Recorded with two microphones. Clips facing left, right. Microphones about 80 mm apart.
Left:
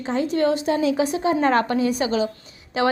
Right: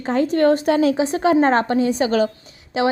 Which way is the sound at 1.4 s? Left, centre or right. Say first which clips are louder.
Right 2 dB; right.